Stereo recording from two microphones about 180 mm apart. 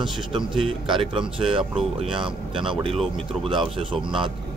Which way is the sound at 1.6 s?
5° right (ahead or behind).